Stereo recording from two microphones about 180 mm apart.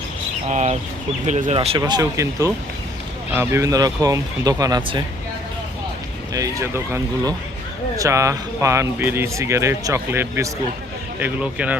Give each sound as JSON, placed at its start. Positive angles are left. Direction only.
{"t": 0.5, "sound": "speech", "side_deg": -40}
{"t": 1.5, "sound": "speech", "side_deg": -30}
{"t": 1.8, "sound": "speech", "side_deg": -20}
{"t": 6.3, "sound": "speech", "side_deg": -20}